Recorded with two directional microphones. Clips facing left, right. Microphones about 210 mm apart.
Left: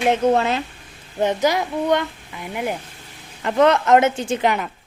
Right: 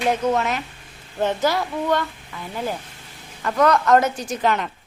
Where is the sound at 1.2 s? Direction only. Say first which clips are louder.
Left 2 dB; 15° left (ahead or behind).